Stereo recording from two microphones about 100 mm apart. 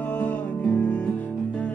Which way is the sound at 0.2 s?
15° left (ahead or behind).